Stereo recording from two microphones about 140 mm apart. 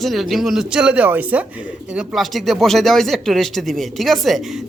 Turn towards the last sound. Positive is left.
turn(degrees=0)  # may be behind; listen again after turning